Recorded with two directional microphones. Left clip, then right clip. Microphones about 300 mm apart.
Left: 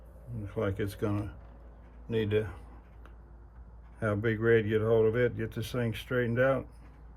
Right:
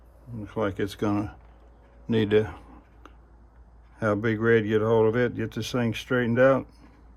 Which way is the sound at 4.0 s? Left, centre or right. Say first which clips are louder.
Right 6 dB; centre.